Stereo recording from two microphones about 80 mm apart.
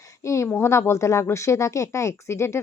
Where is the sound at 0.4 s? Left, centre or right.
Left.